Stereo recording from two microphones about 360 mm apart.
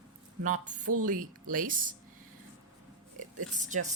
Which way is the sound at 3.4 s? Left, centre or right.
Right.